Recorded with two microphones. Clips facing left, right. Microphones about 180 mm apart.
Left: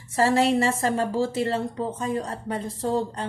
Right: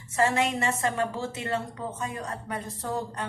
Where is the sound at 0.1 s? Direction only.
35° left (ahead or behind).